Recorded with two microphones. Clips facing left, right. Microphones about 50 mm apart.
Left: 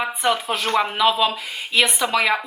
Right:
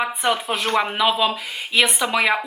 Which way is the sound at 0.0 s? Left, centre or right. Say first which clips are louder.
Even; centre.